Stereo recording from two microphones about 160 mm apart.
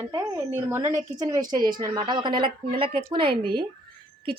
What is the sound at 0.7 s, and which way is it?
A woman's voice, 15° right (ahead or behind).